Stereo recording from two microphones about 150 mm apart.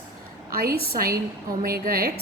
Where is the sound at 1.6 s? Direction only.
90° right.